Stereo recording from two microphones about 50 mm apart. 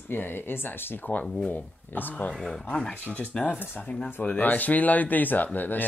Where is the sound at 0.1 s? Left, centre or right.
Left.